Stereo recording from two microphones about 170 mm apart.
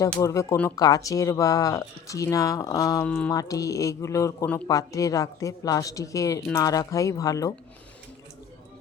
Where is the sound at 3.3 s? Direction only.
20° left (ahead or behind).